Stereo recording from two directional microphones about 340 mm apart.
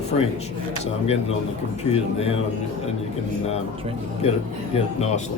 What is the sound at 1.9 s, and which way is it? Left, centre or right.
Speech, centre.